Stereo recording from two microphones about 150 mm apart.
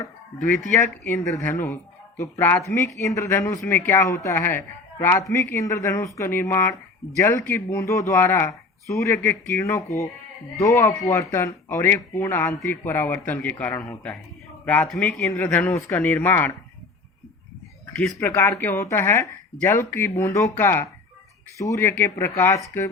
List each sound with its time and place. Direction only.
0.0 s a woman's voice: 15° left (ahead or behind)
18.2 s a woman's voice: 20° left (ahead or behind)